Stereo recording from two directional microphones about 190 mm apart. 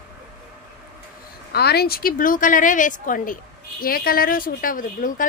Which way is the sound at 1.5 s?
55° left (ahead or behind).